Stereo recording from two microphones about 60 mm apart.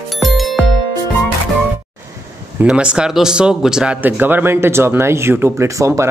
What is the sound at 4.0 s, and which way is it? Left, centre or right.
Speech, right.